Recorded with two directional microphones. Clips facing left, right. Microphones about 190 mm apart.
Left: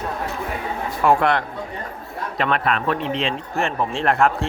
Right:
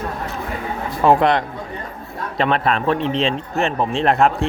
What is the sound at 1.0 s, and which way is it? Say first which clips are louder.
A man's voice: right 3 dB; 20° right (ahead or behind).